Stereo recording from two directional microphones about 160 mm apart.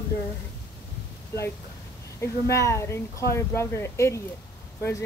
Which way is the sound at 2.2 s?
20° left (ahead or behind).